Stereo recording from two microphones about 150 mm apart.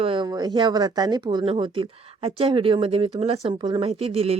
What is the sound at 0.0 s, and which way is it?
Speech, 35° right (ahead or behind).